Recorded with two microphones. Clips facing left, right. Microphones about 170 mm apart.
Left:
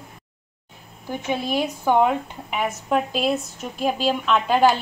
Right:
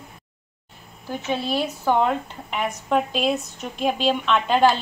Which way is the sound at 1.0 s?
15° left (ahead or behind).